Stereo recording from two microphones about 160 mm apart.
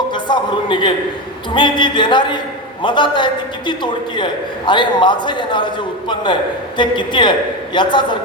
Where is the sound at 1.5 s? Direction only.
30° left (ahead or behind).